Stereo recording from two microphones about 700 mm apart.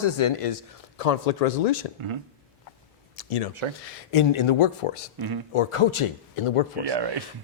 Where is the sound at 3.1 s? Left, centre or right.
Left.